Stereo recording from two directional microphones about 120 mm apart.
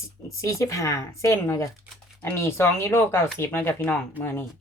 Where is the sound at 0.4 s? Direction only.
30° left (ahead or behind).